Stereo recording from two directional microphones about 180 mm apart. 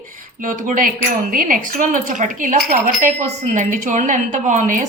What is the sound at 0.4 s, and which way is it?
Speech, 45° right (ahead or behind).